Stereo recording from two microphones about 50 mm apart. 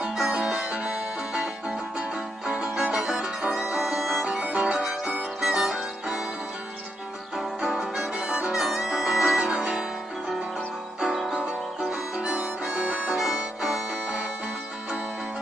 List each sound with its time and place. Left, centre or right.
0.1 s music: centre
4.5 s music: right
4.7 s music: centre
7.3 s music: centre
8.5 s music: centre
11.0 s music: centre
11.3 s harmonica: centre
13.2 s harmonica: centre